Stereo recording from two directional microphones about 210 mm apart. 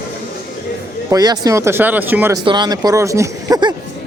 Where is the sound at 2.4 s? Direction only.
20° right (ahead or behind).